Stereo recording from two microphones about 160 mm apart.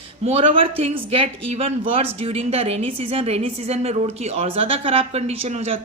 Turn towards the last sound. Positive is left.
turn(degrees=-40)  # may be behind; listen again after turning